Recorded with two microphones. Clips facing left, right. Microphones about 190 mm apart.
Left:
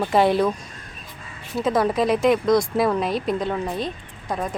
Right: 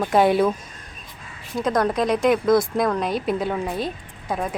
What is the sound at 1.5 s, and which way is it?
A woman's voice, 5° left (ahead or behind).